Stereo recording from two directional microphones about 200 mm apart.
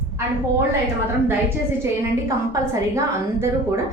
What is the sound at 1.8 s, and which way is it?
A woman's voice, 15° right (ahead or behind).